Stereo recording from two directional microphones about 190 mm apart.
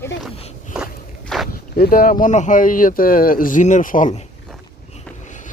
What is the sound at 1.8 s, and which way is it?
Speech, 50° left (ahead or behind).